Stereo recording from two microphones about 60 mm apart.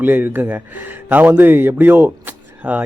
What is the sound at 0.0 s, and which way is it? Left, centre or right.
Speech, right.